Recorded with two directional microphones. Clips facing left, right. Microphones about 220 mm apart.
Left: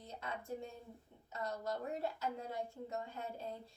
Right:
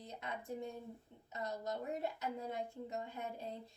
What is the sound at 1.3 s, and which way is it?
Speech, 20° right (ahead or behind).